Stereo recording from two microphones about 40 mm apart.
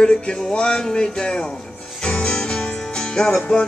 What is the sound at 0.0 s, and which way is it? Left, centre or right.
Music, left.